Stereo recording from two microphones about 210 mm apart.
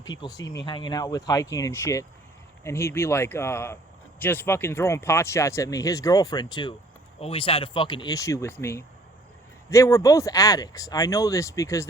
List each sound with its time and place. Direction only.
0.2 s speech: 15° left (ahead or behind)